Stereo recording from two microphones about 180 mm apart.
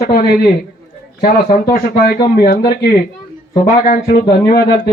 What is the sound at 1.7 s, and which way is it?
Speech, 55° left (ahead or behind).